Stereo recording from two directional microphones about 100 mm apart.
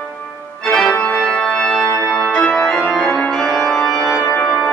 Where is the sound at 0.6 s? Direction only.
10° left (ahead or behind).